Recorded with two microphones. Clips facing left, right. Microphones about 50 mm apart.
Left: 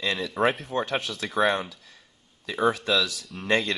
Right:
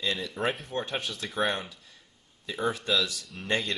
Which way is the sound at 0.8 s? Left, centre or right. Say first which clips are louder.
Left 4 dB; left.